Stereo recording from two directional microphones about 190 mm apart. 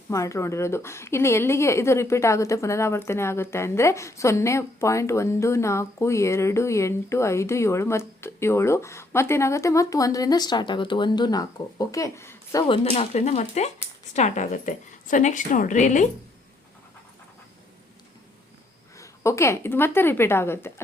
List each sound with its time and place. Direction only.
0.1 s a woman's voice: 15° left (ahead or behind)
12.6 s a woman's voice: 30° left (ahead or behind)
18.9 s a woman's voice: 15° left (ahead or behind)